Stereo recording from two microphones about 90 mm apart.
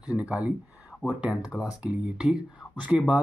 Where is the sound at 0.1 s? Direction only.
15° right (ahead or behind).